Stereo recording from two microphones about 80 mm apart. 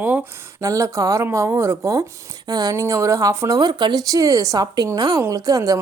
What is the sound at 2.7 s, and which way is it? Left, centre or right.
Speech, right.